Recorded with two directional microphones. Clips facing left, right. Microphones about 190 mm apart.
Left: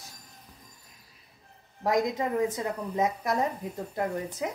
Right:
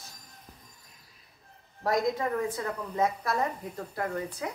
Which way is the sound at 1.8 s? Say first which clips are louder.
Left 1 dB; 15° left (ahead or behind).